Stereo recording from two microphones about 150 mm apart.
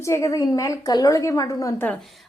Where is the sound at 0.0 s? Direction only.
20° left (ahead or behind).